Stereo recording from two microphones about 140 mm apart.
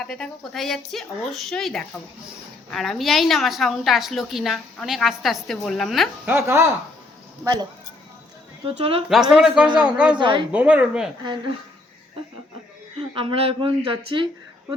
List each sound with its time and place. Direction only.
0.0 s a woman's voice: 5° left (ahead or behind)
6.2 s a woman's voice: 15° right (ahead or behind)
7.4 s speech: 30° right (ahead or behind)
8.6 s a woman's voice: 40° right (ahead or behind)
9.3 s a woman's voice: 5° right (ahead or behind)
10.2 s speech: 35° right (ahead or behind)
10.5 s a woman's voice: 10° right (ahead or behind)
13.0 s speech: 40° right (ahead or behind)